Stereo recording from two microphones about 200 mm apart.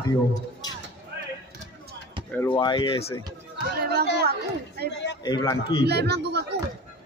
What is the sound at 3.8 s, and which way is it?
Speech, 50° right (ahead or behind).